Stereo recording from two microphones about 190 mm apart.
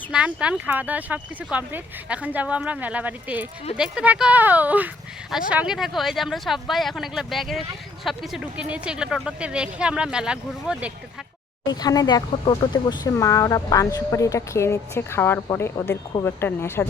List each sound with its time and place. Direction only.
0.1 s speech: 5° right (ahead or behind)
11.7 s speech: 20° left (ahead or behind)